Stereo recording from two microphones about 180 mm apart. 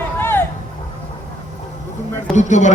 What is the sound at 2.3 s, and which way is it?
Speech, 40° left (ahead or behind).